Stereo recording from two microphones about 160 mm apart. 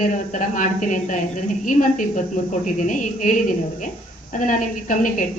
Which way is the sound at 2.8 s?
55° left (ahead or behind).